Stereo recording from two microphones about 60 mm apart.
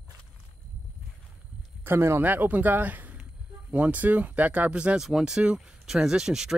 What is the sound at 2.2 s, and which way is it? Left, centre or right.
Speech, right.